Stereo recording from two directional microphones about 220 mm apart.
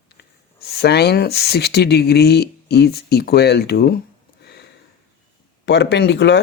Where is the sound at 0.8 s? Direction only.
50° left (ahead or behind).